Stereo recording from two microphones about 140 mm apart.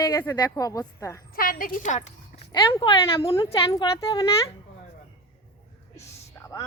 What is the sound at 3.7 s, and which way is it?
Speech, 30° left (ahead or behind).